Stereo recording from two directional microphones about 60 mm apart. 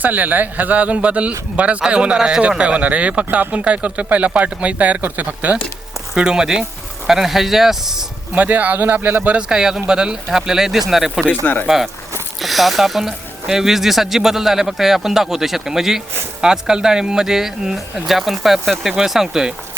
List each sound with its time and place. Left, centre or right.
0.0 s speech: right
6.1 s speech: centre
8.4 s speech: right
9.3 s speech: centre
11.4 s speech: left
12.4 s speech: centre